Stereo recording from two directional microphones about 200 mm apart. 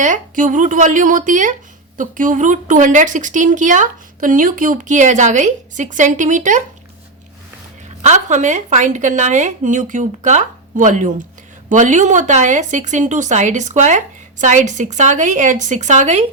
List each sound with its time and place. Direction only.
0.0 s a woman's voice: 40° right (ahead or behind)
8.0 s a woman's voice: 35° right (ahead or behind)